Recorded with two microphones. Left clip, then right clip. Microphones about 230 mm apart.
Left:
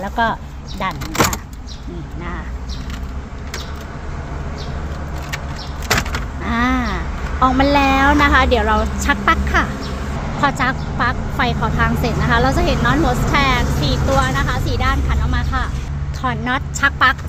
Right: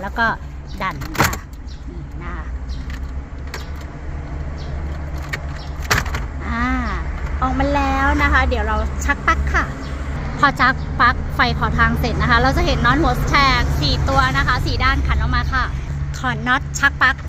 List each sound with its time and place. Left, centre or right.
0.0 s speech: centre
6.4 s speech: centre
10.4 s speech: centre